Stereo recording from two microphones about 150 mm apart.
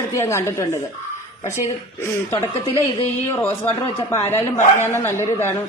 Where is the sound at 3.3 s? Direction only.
15° left (ahead or behind).